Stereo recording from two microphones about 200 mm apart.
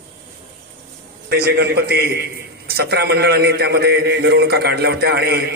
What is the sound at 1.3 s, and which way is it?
A man's voice, 50° right (ahead or behind).